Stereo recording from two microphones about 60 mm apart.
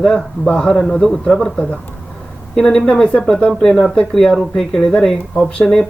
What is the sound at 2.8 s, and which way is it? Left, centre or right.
Speech, centre.